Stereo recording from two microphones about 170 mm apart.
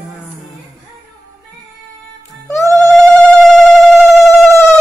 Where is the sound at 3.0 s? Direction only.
5° left (ahead or behind).